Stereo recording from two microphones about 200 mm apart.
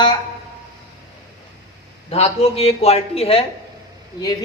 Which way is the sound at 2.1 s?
30° left (ahead or behind).